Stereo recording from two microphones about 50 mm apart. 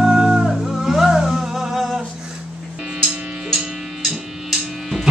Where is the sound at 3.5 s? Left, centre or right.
Centre.